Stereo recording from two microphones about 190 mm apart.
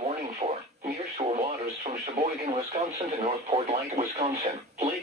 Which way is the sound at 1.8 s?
35° right (ahead or behind).